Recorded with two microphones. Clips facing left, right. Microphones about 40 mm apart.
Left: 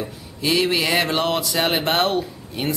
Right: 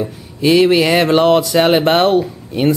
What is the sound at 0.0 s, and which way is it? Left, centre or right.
Speech, centre.